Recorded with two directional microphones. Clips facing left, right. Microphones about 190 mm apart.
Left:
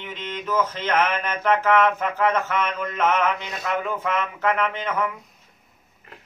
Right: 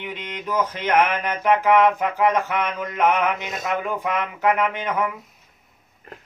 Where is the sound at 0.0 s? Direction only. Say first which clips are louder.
Even; 15° right (ahead or behind).